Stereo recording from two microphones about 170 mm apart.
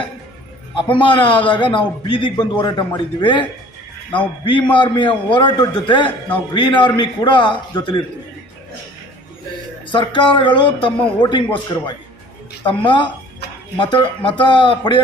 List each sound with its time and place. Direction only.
0.8 s a man's voice: 30° left (ahead or behind)
4.4 s a man's voice: 30° left (ahead or behind)
9.9 s a man's voice: 30° left (ahead or behind)
12.6 s a man's voice: 30° left (ahead or behind)